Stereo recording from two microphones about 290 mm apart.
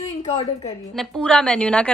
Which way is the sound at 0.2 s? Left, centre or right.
Centre.